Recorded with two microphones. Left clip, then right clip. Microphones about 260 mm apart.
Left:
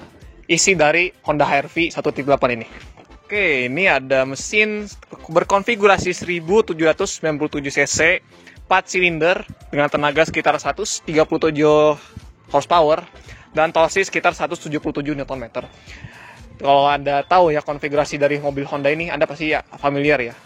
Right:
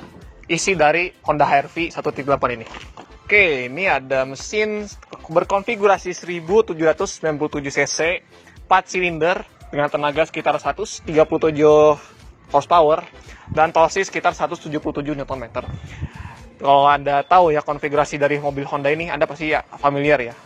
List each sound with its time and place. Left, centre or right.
0.5 s a man's voice: left
3.4 s a man's voice: left
14.0 s speech: left
14.4 s a man's voice: left
16.6 s a man's voice: left